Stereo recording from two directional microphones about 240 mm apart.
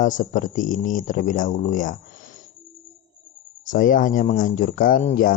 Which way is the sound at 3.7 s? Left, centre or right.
Left.